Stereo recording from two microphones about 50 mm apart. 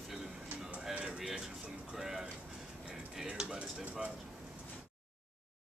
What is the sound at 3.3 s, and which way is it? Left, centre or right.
Speech, centre.